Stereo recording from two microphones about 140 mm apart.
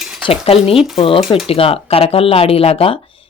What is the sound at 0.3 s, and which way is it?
Speech, 45° left (ahead or behind).